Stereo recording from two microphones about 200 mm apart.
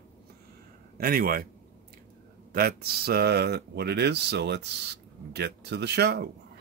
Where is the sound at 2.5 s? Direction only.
50° right (ahead or behind).